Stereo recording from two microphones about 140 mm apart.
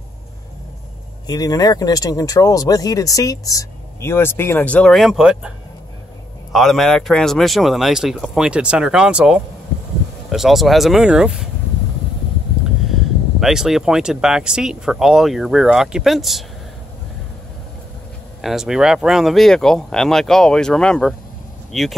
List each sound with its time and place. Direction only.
1.2 s speech: 25° left (ahead or behind); by 5.5 s 5° right (ahead or behind)
6.5 s speech: centre (ahead or behind)
13.4 s speech: 5° right (ahead or behind)
18.4 s speech: 5° right (ahead or behind)